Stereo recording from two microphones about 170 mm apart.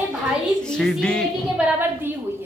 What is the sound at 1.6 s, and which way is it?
Speech, 10° right (ahead or behind).